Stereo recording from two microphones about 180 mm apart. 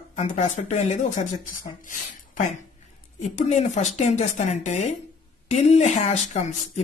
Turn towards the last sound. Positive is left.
turn(degrees=40)  # may be behind; listen again after turning